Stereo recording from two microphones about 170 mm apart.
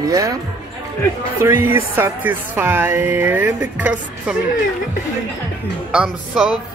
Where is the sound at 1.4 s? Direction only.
15° right (ahead or behind).